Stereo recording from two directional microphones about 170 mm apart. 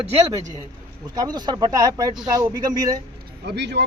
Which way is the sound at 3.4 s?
90° right.